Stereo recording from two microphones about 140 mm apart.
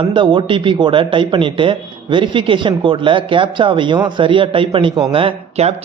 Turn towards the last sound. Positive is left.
turn(degrees=-45)  # may be behind; listen again after turning